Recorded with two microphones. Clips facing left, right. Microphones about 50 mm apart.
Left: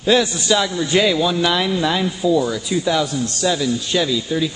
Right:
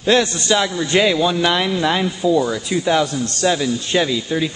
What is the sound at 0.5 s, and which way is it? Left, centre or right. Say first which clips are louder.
A man's voice: left 1 dB; centre.